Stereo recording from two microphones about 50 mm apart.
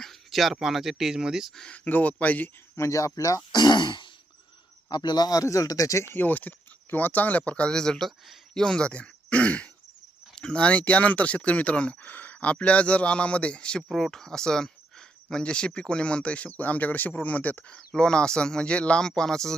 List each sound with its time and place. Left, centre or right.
0.0 s a sound: centre
0.5 s speech: centre
1.7 s speech: left
2.7 s speech: left
5.4 s speech: left
6.1 s speech: left
7.7 s speech: centre
8.6 s speech: centre
13.9 s speech: centre; by 17.7 s left
17.7 s speech: centre